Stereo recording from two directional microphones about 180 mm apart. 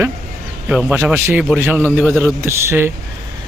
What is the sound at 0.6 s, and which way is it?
Speech, 5° right (ahead or behind).